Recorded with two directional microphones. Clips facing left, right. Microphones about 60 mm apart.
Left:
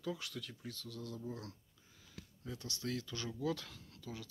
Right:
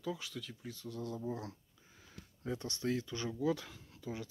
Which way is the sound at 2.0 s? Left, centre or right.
Right.